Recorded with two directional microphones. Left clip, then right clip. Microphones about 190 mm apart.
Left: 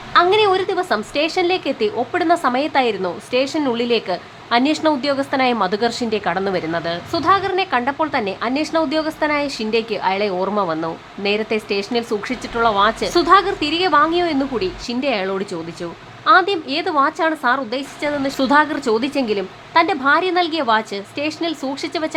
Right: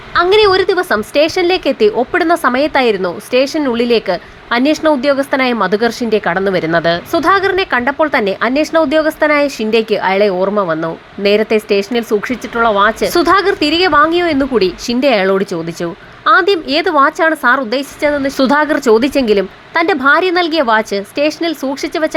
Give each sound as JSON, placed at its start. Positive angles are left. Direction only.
{"t": 0.1, "sound": "speech", "side_deg": -20}